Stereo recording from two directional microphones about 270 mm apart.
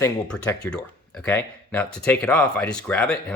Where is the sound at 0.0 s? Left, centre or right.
Centre.